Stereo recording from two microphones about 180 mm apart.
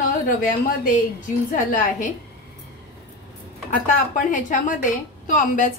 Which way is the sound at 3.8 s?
45° left (ahead or behind).